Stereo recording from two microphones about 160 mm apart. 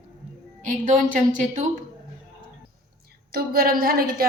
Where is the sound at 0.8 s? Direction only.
55° right (ahead or behind).